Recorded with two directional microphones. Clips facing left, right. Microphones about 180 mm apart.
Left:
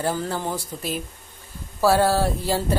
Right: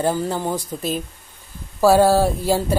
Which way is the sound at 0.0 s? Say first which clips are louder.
Right 4 dB; 15° right (ahead or behind).